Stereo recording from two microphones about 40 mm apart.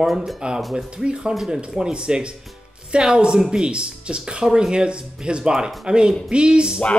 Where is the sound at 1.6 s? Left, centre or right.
Right.